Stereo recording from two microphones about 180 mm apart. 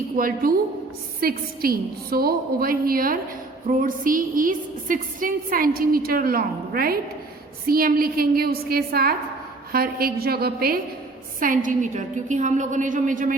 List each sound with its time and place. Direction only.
0.2 s a woman's voice: 50° right (ahead or behind)